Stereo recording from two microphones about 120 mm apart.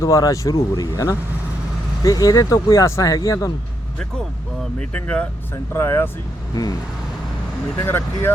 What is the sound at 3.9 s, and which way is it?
Speech, 5° left (ahead or behind).